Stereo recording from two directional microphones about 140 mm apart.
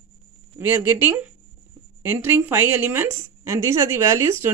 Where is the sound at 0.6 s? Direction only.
15° right (ahead or behind).